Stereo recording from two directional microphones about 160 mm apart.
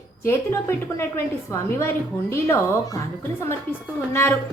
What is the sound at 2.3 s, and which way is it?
Speech, 20° left (ahead or behind).